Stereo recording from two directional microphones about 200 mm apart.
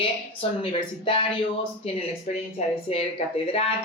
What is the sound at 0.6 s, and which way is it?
Speech, 25° left (ahead or behind).